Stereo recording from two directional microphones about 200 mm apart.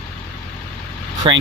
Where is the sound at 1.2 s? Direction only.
25° right (ahead or behind).